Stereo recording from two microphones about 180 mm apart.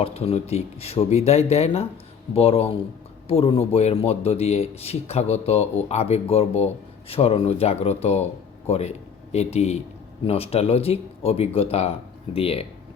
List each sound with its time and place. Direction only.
0.0 s speech: 35° left (ahead or behind)